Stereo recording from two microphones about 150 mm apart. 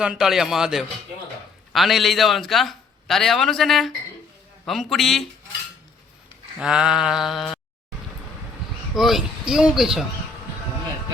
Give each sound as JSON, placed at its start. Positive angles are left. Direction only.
{"t": 0.0, "sound": "a man's voice", "side_deg": -5}
{"t": 6.6, "sound": "a man's voice", "side_deg": -5}
{"t": 9.0, "sound": "a man's voice", "side_deg": 0}